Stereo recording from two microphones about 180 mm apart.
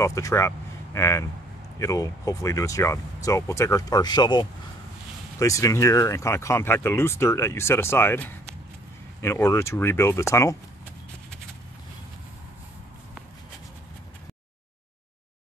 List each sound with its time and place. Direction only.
0.0 s speech: 15° left (ahead or behind)